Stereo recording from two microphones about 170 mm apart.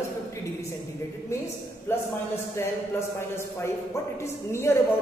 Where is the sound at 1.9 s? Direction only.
15° left (ahead or behind).